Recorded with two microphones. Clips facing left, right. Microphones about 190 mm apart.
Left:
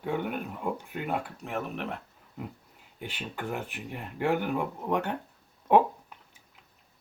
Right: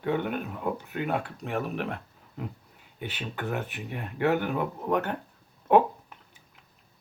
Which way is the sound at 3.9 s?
10° left (ahead or behind).